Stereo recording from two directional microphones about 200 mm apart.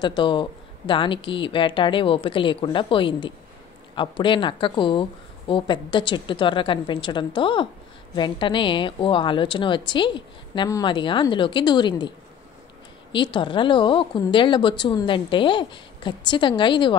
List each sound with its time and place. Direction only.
0.0 s speech: 25° left (ahead or behind)
13.1 s speech: 25° left (ahead or behind)